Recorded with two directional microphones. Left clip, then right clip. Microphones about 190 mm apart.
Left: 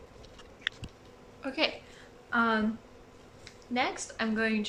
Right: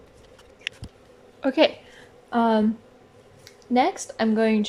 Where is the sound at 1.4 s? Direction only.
45° right (ahead or behind).